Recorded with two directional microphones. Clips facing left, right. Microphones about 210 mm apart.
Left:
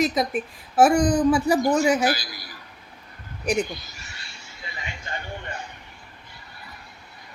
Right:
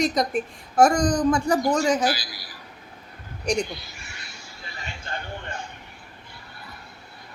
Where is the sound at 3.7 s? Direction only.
45° left (ahead or behind).